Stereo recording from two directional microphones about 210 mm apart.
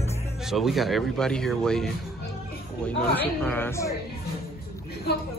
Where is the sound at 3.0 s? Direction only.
10° left (ahead or behind).